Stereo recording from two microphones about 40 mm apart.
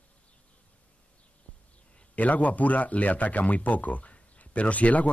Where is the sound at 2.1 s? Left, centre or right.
Left.